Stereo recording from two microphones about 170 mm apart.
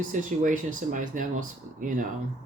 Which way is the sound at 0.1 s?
50° right (ahead or behind).